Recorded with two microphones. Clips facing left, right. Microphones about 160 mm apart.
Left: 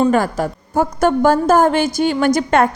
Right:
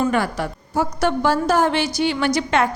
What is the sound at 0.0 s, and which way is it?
A woman's voice, 40° left (ahead or behind).